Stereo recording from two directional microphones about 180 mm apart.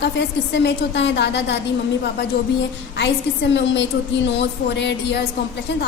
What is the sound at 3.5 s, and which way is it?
A woman's voice, 85° left.